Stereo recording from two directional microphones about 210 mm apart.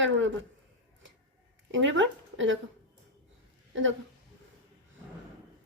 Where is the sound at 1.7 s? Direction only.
60° right (ahead or behind).